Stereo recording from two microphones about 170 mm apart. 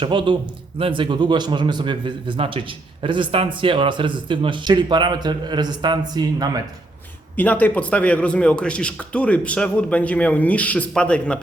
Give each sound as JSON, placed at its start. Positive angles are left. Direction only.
{"t": 0.0, "sound": "a man's voice", "side_deg": -30}
{"t": 7.3, "sound": "speech", "side_deg": 10}